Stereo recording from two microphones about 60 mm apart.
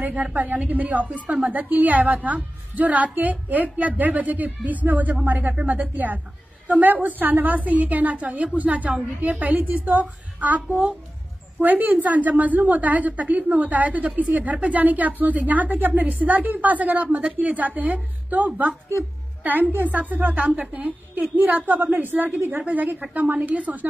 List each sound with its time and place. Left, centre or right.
0.0 s a woman's voice: right
11.6 s a woman's voice: right